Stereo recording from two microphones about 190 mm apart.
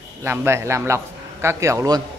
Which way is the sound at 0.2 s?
10° right (ahead or behind).